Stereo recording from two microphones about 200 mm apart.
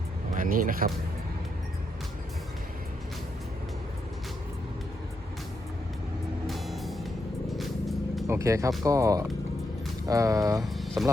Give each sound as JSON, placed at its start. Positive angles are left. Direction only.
{"t": 0.3, "sound": "speech", "side_deg": -45}
{"t": 6.5, "sound": "music", "side_deg": 0}
{"t": 8.3, "sound": "speech", "side_deg": -15}
{"t": 10.6, "sound": "a sound", "side_deg": 0}